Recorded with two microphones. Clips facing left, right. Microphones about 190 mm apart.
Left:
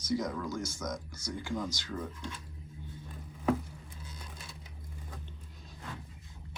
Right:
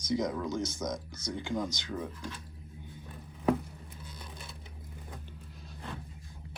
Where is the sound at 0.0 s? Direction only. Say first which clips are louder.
Right 2 dB; 20° right (ahead or behind).